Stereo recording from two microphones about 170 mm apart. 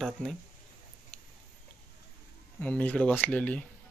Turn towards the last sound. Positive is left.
turn(degrees=10)  # may be behind; listen again after turning